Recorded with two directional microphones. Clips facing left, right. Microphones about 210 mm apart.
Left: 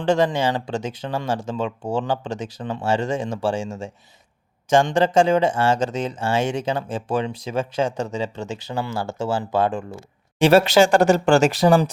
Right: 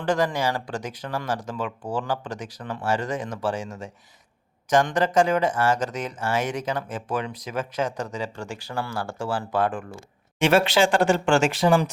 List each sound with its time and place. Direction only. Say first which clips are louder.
0.0 s speech: left 4 dB; 25° left (ahead or behind)
10.4 s speech: left 5 dB; 40° left (ahead or behind)